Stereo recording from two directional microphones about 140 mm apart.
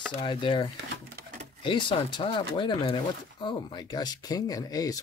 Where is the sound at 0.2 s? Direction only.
35° left (ahead or behind).